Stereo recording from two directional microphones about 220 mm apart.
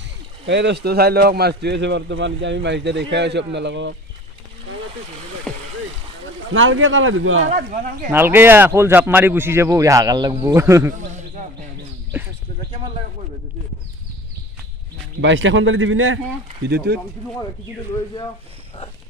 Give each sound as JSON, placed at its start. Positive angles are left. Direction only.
{"t": 0.5, "sound": "speech", "side_deg": -50}
{"t": 5.5, "sound": "a sound", "side_deg": 5}
{"t": 6.5, "sound": "a man's voice", "side_deg": -60}
{"t": 7.4, "sound": "speech", "side_deg": -35}
{"t": 8.1, "sound": "speech", "side_deg": -10}
{"t": 11.0, "sound": "a sound", "side_deg": -35}
{"t": 15.1, "sound": "a man's voice", "side_deg": -55}
{"t": 16.6, "sound": "speech", "side_deg": -45}